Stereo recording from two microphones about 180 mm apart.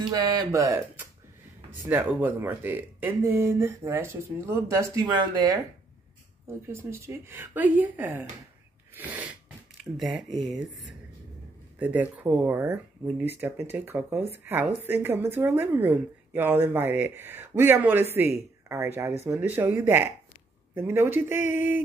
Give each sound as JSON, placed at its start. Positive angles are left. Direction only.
{"t": 0.0, "sound": "speech", "side_deg": -20}
{"t": 8.9, "sound": "sneeze", "side_deg": -10}
{"t": 9.9, "sound": "speech", "side_deg": 0}
{"t": 11.8, "sound": "speech", "side_deg": -10}